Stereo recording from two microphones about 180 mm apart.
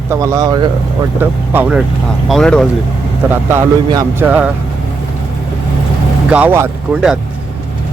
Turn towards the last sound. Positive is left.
turn(degrees=-5)  # may be behind; listen again after turning